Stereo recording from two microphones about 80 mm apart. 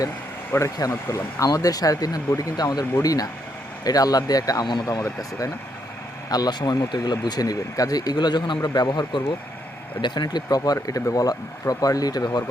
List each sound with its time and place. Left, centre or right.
0.8 s speech: left
4.6 s speech: left
4.9 s speech: left
6.3 s speech: left
8.1 s speech: left